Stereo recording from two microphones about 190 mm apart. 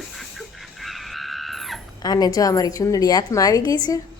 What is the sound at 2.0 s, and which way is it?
A woman's voice, 20° left (ahead or behind).